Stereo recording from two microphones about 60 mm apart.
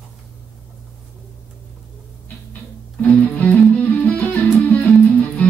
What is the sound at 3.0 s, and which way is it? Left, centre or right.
Music, left.